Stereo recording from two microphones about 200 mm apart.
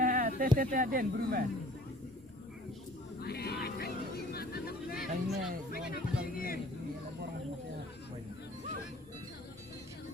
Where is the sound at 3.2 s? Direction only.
50° left (ahead or behind).